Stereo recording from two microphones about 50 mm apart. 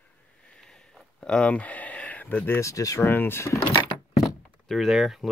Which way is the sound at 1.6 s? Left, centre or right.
Left.